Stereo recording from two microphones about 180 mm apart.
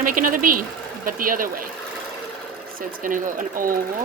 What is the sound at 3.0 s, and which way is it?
Speech, 50° right (ahead or behind).